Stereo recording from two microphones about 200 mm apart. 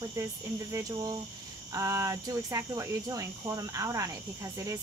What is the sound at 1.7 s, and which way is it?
Speech, 15° right (ahead or behind).